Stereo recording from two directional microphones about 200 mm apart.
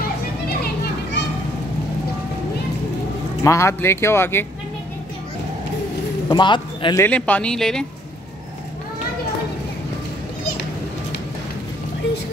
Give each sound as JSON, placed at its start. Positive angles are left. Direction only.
{"t": 3.4, "sound": "speech", "side_deg": 15}
{"t": 6.2, "sound": "speech", "side_deg": 20}
{"t": 7.0, "sound": "speech", "side_deg": 5}